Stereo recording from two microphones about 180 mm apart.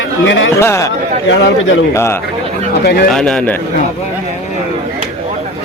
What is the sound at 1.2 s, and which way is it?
Speech, 90° left.